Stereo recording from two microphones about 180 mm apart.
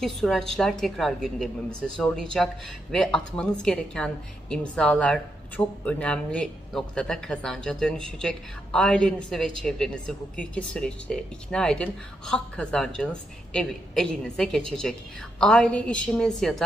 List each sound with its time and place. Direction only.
0.0 s a woman's voice: centre (ahead or behind)